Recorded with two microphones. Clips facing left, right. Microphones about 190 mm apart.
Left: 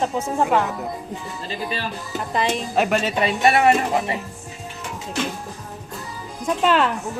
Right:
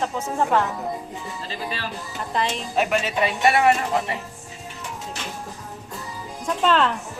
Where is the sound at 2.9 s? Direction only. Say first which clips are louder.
Left 2 dB; 30° left (ahead or behind).